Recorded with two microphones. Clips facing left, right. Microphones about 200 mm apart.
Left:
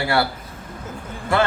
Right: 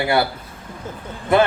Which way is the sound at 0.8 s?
20° right (ahead or behind).